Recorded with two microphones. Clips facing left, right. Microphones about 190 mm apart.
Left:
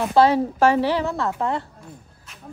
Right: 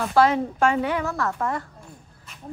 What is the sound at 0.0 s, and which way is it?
A woman's voice, 25° left (ahead or behind).